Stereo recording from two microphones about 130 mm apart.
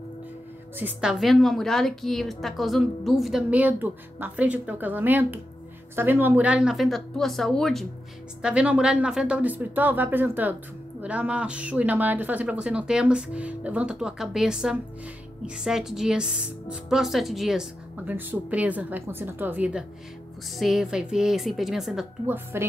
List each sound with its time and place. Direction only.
0.7 s speech: 15° right (ahead or behind)
1.2 s speech: centre (ahead or behind)
18.0 s speech: 15° right (ahead or behind)
20.5 s speech: centre (ahead or behind)
22.3 s a woman's voice: 20° right (ahead or behind)